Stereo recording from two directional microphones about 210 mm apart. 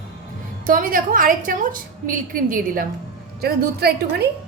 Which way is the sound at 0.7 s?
40° right (ahead or behind).